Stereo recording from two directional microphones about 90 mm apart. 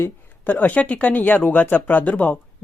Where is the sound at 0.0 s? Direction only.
20° left (ahead or behind).